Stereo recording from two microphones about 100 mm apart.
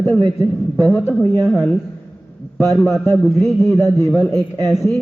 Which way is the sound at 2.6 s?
25° left (ahead or behind).